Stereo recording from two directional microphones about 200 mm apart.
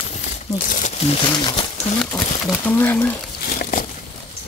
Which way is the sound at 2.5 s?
10° left (ahead or behind).